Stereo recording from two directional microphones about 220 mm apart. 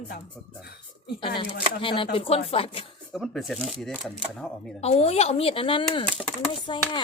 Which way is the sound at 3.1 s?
Centre (ahead or behind).